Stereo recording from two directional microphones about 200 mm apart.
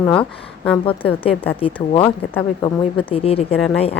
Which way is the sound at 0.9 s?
25° left (ahead or behind).